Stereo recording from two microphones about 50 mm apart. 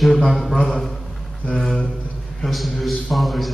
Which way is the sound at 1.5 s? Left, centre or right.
Centre.